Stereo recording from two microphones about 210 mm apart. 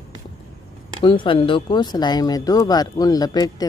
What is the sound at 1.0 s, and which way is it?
Speech, 25° left (ahead or behind).